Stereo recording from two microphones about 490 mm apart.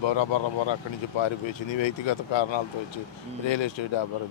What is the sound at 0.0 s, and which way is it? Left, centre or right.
Speech, left.